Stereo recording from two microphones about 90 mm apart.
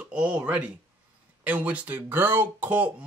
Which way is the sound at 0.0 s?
15° right (ahead or behind).